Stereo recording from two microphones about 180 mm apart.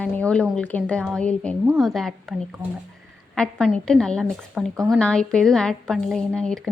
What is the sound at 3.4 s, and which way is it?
A woman's voice, 5° left (ahead or behind).